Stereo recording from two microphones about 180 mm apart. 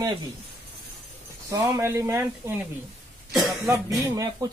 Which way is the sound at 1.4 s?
15° right (ahead or behind).